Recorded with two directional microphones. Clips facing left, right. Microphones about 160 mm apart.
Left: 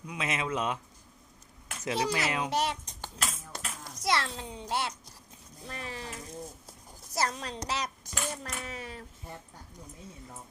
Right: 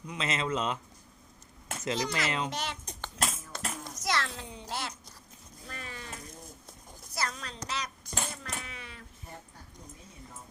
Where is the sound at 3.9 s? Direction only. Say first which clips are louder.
Left 3 dB; 30° left (ahead or behind).